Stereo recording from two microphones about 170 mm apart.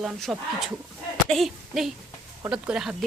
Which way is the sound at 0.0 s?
Centre (ahead or behind).